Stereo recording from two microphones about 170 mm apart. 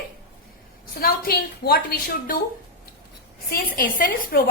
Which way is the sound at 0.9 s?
60° left (ahead or behind).